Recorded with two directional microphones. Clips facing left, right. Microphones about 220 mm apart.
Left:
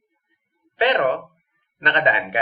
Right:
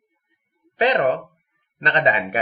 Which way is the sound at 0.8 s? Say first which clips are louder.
Right 1 dB; 35° right (ahead or behind).